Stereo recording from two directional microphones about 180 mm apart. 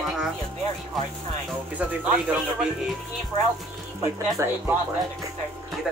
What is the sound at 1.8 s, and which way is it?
Speech, 10° right (ahead or behind).